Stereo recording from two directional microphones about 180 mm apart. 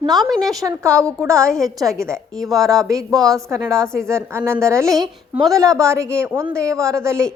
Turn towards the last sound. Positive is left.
turn(degrees=-15)  # may be behind; listen again after turning